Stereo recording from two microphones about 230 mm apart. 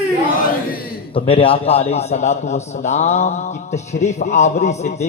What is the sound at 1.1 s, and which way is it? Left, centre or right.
A man's voice, left.